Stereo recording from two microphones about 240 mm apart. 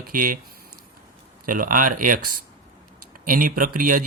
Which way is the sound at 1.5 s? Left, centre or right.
Right.